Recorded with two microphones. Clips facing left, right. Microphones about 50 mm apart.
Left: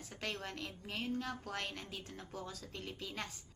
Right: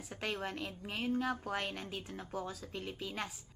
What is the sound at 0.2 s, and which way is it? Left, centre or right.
A woman's voice, centre.